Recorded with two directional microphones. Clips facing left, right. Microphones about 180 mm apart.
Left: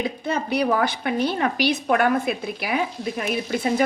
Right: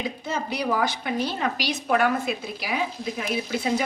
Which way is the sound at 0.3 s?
60° left (ahead or behind).